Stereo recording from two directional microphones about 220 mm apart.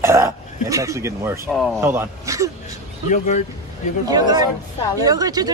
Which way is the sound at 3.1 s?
35° left (ahead or behind).